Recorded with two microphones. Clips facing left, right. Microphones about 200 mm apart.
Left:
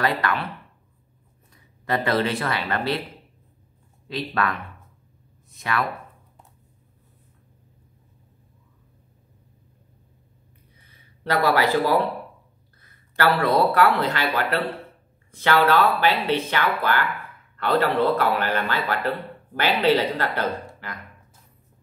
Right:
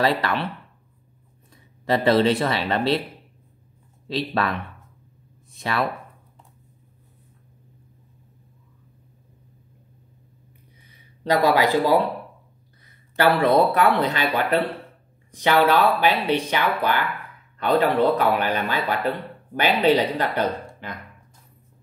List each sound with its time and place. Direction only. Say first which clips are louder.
0.0 s speech: right 2 dB; 30° right (ahead or behind)
1.9 s speech: right 5 dB; 25° right (ahead or behind)
4.3 s speech: even; 25° right (ahead or behind)
5.6 s speech: right 2 dB; 25° right (ahead or behind)
10.9 s a man's voice: right 4 dB; 15° right (ahead or behind)